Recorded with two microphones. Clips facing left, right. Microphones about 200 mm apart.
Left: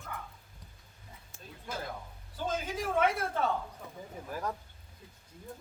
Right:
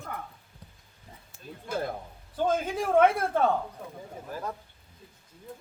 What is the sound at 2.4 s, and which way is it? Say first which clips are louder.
A man's voice: right 7 dB; 55° right (ahead or behind).